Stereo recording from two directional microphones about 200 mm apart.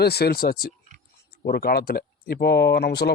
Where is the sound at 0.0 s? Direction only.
55° left (ahead or behind).